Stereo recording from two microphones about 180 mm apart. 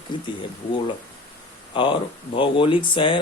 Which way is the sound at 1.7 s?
25° left (ahead or behind).